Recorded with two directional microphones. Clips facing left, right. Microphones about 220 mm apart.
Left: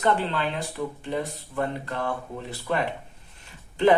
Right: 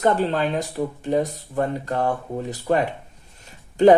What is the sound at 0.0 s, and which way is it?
Speech, 40° right (ahead or behind).